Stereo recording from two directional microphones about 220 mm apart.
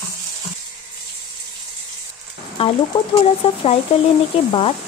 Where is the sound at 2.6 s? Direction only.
25° left (ahead or behind).